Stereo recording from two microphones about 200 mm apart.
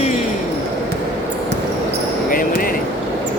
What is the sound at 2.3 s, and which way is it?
Basketball bounce, 45° left (ahead or behind).